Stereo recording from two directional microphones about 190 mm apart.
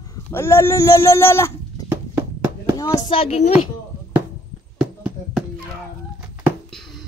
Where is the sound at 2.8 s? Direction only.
20° left (ahead or behind).